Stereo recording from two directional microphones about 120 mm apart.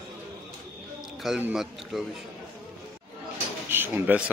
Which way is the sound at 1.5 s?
Centre (ahead or behind).